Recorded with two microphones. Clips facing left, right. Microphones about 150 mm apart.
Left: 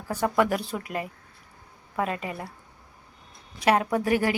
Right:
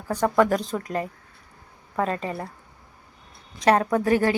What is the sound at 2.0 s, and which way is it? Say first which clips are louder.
Speech: right 3 dB; 35° right (ahead or behind).